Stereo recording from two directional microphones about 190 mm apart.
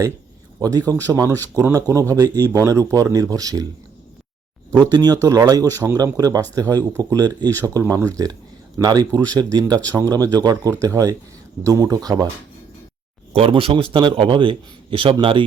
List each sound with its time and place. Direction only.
0.6 s speech: 20° right (ahead or behind)
4.8 s speech: 20° right (ahead or behind)
13.3 s speech: 30° right (ahead or behind)